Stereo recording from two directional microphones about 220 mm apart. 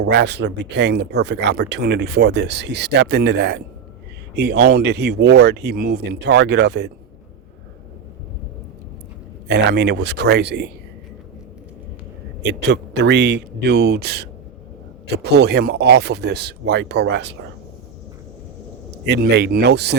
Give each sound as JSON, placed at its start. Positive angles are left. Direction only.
{"t": 0.0, "sound": "speech", "side_deg": -50}
{"t": 9.5, "sound": "speech", "side_deg": -50}
{"t": 12.4, "sound": "speech", "side_deg": -50}
{"t": 19.0, "sound": "speech", "side_deg": -50}